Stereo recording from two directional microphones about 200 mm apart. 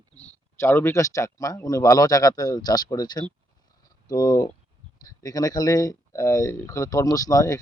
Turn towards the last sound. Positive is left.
turn(degrees=15)  # may be behind; listen again after turning